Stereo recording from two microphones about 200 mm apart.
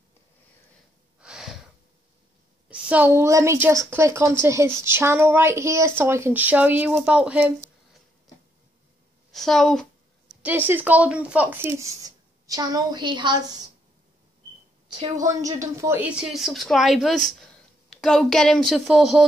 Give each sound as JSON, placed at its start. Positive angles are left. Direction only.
{"t": 1.2, "sound": "gasp", "side_deg": -5}
{"t": 2.7, "sound": "speech", "side_deg": -10}
{"t": 9.3, "sound": "speech", "side_deg": 0}
{"t": 10.7, "sound": "speech", "side_deg": -10}
{"t": 15.1, "sound": "speech", "side_deg": -15}